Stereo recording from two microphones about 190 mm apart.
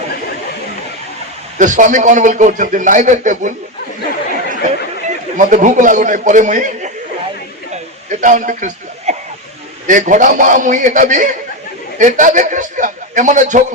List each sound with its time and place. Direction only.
1.5 s a man's voice: 40° right (ahead or behind)
5.0 s a man's voice: 40° right (ahead or behind)
7.7 s chuckle: 40° right (ahead or behind)
9.8 s a man's voice: 45° right (ahead or behind)